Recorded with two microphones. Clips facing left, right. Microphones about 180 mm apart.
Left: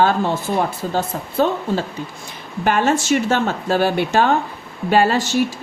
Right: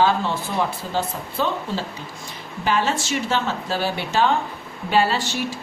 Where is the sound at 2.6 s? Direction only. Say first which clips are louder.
Left 5 dB; 50° left (ahead or behind).